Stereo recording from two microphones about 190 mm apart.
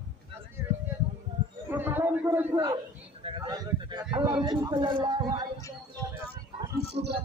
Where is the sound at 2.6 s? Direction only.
25° right (ahead or behind).